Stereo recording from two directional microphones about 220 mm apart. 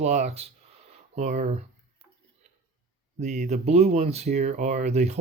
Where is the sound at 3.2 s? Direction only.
30° right (ahead or behind).